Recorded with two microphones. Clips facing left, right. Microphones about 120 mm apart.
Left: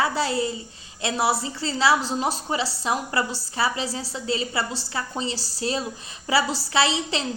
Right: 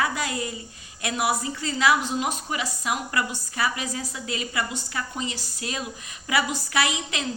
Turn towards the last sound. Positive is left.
turn(degrees=30)  # may be behind; listen again after turning